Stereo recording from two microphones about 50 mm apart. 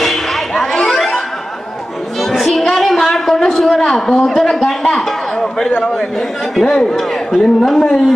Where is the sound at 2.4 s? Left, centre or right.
Centre.